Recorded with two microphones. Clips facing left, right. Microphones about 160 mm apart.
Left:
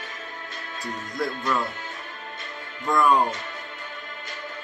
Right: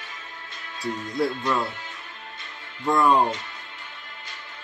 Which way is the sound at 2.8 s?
25° right (ahead or behind).